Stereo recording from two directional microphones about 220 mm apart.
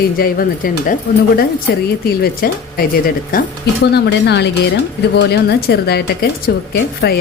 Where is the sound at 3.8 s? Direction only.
50° left (ahead or behind).